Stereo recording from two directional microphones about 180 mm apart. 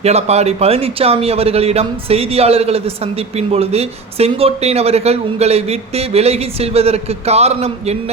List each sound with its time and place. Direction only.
0.0 s speech: 35° right (ahead or behind)